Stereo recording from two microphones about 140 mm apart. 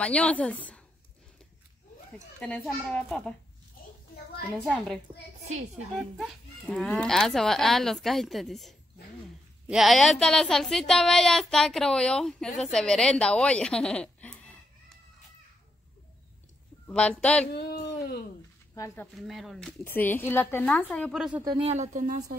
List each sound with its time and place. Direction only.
0.0 s speech: 10° left (ahead or behind)
2.4 s speech: 10° left (ahead or behind)
4.6 s speech: 5° left (ahead or behind)
6.1 s speech: centre (ahead or behind)
16.8 s speech: 10° left (ahead or behind)
17.5 s a sound: 90° left
19.1 s speech: centre (ahead or behind)
19.8 s speech: 15° left (ahead or behind)
21.1 s speech: centre (ahead or behind)
21.5 s speech: 50° right (ahead or behind)